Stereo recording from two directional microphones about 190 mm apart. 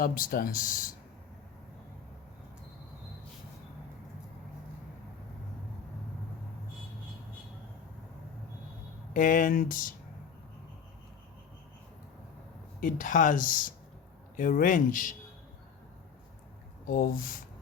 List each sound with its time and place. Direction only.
0.0 s speech: 50° left (ahead or behind)
9.1 s speech: 45° left (ahead or behind)
12.8 s speech: 45° left (ahead or behind)
16.8 s speech: 45° left (ahead or behind)